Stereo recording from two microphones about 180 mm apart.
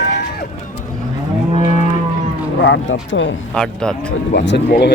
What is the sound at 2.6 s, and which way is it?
Speech, 85° left.